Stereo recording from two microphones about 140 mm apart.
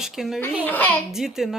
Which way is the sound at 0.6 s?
10° left (ahead or behind).